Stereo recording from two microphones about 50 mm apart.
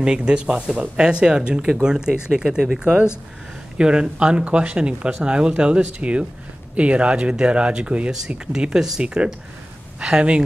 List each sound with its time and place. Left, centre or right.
0.0 s speech: centre